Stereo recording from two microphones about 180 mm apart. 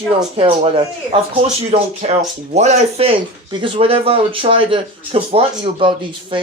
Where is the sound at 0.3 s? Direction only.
30° right (ahead or behind).